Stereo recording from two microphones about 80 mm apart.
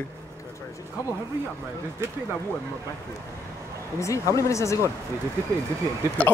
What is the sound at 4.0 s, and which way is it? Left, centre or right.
Speech, left.